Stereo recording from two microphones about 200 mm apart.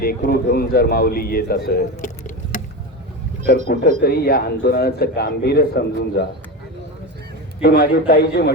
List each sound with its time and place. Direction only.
0.0 s a man's voice: 50° left (ahead or behind)
3.7 s a man's voice: 50° left (ahead or behind)
7.6 s a man's voice: 50° left (ahead or behind)